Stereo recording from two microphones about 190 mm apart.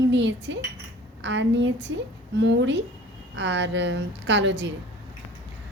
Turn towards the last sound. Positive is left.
turn(degrees=-70)  # may be behind; listen again after turning